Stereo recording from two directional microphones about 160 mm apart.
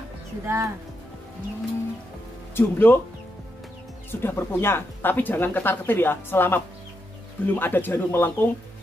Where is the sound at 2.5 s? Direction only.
15° left (ahead or behind).